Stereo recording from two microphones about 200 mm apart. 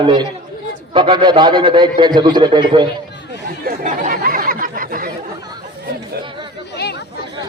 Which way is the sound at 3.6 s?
45° right (ahead or behind).